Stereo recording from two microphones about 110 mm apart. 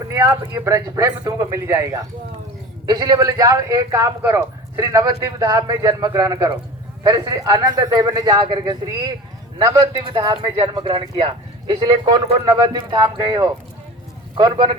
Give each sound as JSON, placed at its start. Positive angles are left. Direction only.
{"t": 0.1, "sound": "a man's voice", "side_deg": -25}
{"t": 10.0, "sound": "a man's voice", "side_deg": -45}